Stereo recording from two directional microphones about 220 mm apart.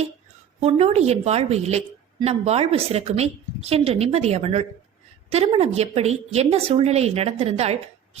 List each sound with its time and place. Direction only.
0.6 s a woman's voice: 30° right (ahead or behind)